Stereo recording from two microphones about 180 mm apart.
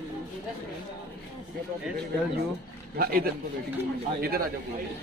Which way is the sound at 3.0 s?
55° right (ahead or behind).